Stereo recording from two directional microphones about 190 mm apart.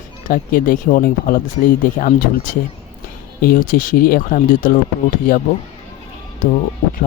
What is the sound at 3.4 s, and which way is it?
Speech, 45° left (ahead or behind).